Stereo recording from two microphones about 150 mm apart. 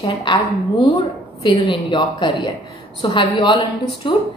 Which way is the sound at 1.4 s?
30° left (ahead or behind).